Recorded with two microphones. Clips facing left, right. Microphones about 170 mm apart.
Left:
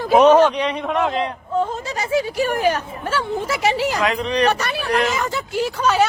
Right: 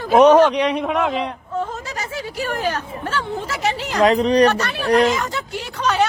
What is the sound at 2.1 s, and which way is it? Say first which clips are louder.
Speech: left 8 dB; 15° left (ahead or behind).